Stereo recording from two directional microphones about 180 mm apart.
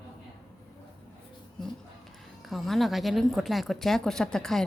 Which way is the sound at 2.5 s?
Centre (ahead or behind).